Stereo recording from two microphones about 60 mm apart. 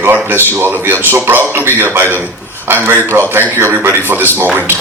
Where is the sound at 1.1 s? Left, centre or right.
Right.